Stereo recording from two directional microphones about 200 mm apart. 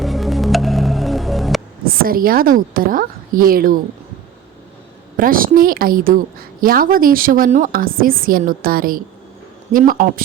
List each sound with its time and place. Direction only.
0.0 s music: centre (ahead or behind)
1.9 s a woman's voice: 45° right (ahead or behind)
5.1 s a woman's voice: 45° right (ahead or behind)